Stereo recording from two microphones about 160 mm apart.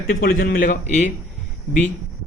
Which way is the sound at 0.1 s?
65° left (ahead or behind).